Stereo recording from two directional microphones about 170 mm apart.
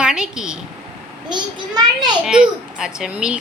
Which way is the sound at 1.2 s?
25° right (ahead or behind).